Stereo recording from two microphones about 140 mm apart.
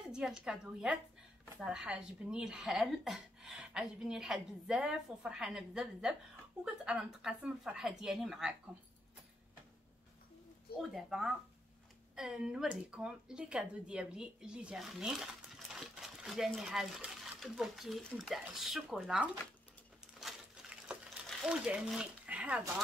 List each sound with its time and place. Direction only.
0.1 s speech: 5° right (ahead or behind)
10.8 s speech: centre (ahead or behind)
20.2 s a sound: 5° right (ahead or behind)